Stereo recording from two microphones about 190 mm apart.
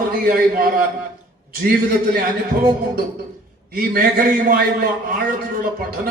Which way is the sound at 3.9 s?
50° right (ahead or behind).